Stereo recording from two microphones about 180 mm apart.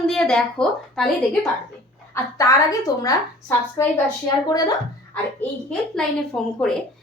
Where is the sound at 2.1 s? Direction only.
15° left (ahead or behind).